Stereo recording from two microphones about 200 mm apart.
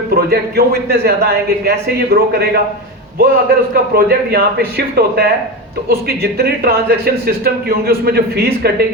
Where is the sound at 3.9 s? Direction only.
50° right (ahead or behind).